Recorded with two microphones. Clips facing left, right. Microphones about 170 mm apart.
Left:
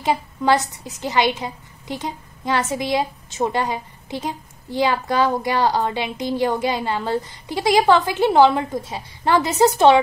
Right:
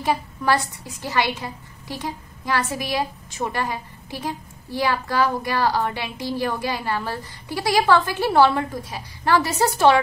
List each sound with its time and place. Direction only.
0.0 s a woman's voice: 20° left (ahead or behind)